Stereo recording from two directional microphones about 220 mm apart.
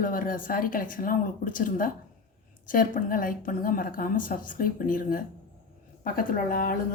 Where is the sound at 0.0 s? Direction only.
40° left (ahead or behind).